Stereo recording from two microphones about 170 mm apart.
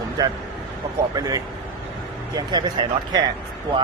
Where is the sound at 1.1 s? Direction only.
20° right (ahead or behind).